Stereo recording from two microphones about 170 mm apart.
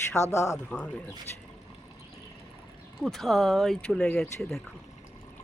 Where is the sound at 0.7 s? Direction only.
5° left (ahead or behind).